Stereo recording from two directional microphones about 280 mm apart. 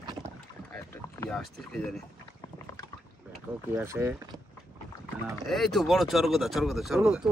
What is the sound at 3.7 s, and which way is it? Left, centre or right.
Speech, centre.